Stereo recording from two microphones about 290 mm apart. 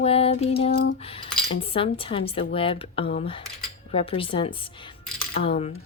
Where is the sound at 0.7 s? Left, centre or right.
Left.